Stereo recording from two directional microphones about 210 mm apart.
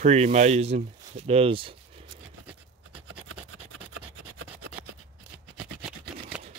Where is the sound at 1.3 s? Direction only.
25° right (ahead or behind).